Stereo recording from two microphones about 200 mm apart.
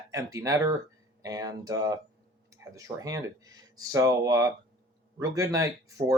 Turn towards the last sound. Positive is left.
turn(degrees=-15)  # may be behind; listen again after turning